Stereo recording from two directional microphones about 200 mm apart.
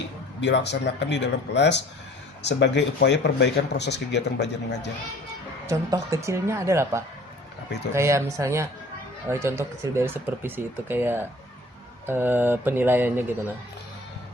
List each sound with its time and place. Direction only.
0.4 s speech: 60° left (ahead or behind)
5.6 s speech: 15° right (ahead or behind)